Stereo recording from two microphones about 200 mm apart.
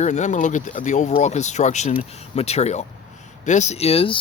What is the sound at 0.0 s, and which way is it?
Speech, 35° left (ahead or behind).